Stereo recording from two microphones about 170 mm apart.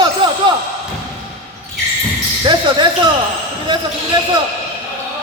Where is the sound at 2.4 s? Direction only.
25° right (ahead or behind).